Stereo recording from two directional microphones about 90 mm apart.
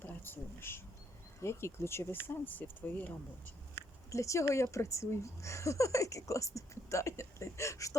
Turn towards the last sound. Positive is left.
turn(degrees=35)  # may be behind; listen again after turning